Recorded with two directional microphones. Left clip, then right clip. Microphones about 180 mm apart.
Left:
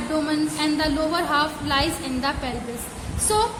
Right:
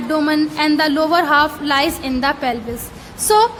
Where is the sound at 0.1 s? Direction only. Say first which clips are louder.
Right 7 dB; 40° right (ahead or behind).